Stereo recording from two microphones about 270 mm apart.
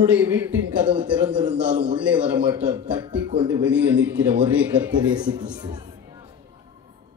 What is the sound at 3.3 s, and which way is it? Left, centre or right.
Speech, centre.